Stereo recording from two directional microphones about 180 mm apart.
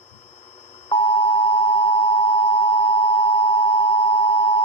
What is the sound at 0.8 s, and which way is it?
Busy signal, 30° left (ahead or behind).